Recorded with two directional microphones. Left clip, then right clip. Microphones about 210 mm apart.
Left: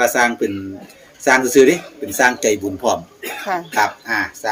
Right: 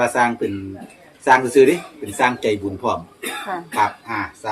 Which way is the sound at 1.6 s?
50° left (ahead or behind).